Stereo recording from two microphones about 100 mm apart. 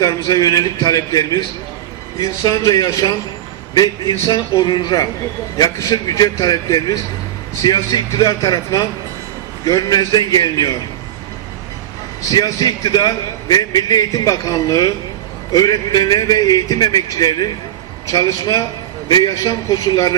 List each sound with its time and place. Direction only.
0.0 s a man's voice: 35° left (ahead or behind)
12.3 s a man's voice: 40° left (ahead or behind)